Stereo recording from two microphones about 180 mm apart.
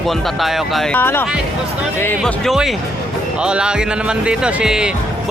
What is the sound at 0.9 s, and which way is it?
Speech, 10° left (ahead or behind).